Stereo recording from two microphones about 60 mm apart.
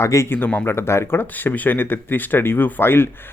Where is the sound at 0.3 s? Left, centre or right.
Left.